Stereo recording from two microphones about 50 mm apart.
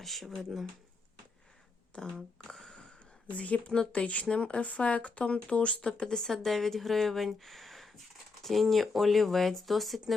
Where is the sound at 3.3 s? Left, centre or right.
Left.